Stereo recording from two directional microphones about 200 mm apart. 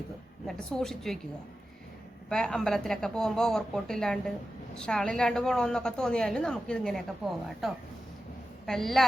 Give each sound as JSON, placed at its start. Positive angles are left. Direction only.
{"t": 0.4, "sound": "a woman's voice", "side_deg": 0}
{"t": 2.3, "sound": "a woman's voice", "side_deg": 5}